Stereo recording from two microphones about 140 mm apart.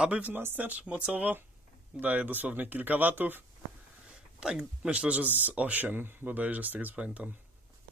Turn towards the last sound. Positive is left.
turn(degrees=-10)  # may be behind; listen again after turning